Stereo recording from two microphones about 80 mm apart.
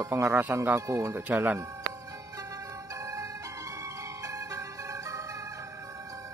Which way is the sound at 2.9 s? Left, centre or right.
Right.